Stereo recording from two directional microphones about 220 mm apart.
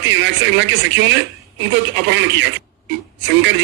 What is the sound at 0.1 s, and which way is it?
Speech, 55° right (ahead or behind).